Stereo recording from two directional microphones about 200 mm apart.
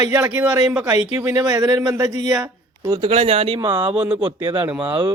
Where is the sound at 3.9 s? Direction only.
5° right (ahead or behind).